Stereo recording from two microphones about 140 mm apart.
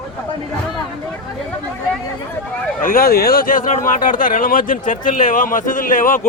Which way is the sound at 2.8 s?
90° left.